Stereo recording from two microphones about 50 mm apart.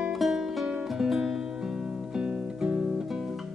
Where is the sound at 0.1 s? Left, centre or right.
Centre.